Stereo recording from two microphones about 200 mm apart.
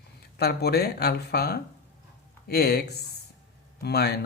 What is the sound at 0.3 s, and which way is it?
Speech, 55° left (ahead or behind).